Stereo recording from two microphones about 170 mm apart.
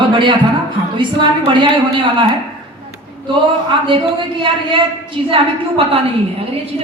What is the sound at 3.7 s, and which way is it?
Speech, 30° right (ahead or behind).